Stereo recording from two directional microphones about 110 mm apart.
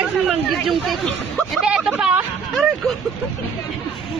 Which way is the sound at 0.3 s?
Centre (ahead or behind).